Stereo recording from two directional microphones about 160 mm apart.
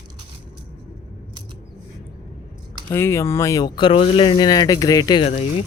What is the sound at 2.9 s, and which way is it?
Speech, 15° left (ahead or behind).